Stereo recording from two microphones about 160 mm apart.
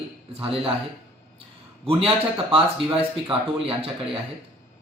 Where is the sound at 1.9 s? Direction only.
35° right (ahead or behind).